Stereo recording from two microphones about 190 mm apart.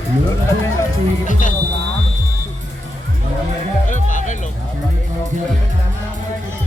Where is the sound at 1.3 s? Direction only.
40° left (ahead or behind).